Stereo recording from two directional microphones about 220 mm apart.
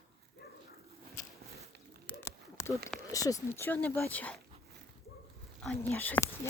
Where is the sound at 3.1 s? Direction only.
15° left (ahead or behind).